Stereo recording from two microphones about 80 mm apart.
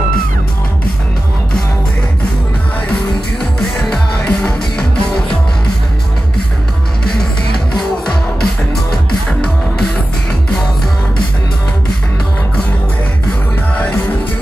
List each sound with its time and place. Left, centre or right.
3.5 s music: centre
7.2 s music: centre
13.7 s music: centre